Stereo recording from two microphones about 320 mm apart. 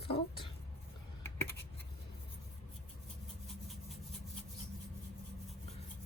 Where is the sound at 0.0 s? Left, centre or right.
Centre.